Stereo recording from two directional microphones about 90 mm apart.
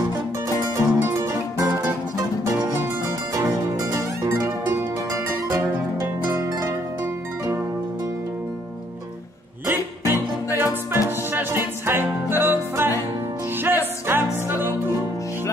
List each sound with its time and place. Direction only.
0.7 s music: 35° right (ahead or behind)
9.7 s music: 25° right (ahead or behind)